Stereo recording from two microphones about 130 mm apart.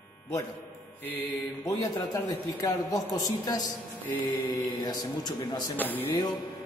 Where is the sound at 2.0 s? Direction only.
25° left (ahead or behind).